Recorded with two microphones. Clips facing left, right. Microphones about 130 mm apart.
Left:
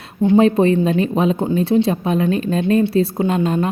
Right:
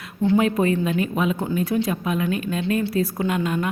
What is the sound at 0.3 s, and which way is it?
A woman's voice, 30° left (ahead or behind).